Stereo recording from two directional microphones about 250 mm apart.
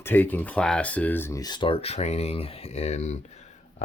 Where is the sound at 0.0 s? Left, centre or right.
Centre.